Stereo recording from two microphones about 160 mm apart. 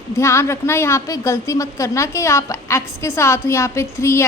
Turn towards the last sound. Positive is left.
turn(degrees=15)  # may be behind; listen again after turning